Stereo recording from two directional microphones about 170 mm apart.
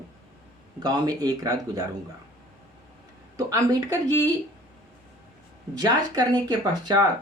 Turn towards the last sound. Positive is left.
turn(degrees=-25)  # may be behind; listen again after turning